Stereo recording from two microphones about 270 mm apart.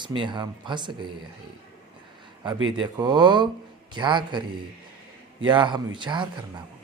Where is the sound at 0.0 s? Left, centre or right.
Centre.